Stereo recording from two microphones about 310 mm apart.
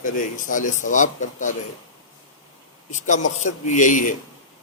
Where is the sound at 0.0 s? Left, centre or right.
Left.